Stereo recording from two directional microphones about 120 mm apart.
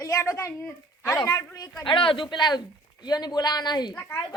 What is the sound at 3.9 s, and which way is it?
Speech, 20° left (ahead or behind).